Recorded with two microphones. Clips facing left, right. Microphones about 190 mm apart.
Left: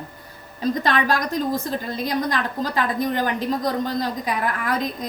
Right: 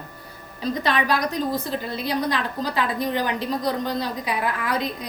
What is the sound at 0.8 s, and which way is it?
A woman's voice, 45° left (ahead or behind).